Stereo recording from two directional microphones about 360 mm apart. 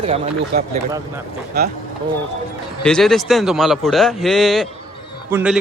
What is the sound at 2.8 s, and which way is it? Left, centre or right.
A man's voice, centre.